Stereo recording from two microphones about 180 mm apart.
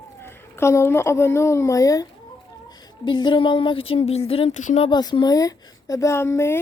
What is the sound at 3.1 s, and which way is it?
A woman's voice, 25° left (ahead or behind).